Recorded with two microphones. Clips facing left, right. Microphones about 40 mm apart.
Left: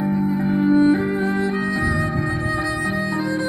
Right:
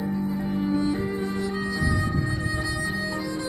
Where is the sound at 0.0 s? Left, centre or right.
Left.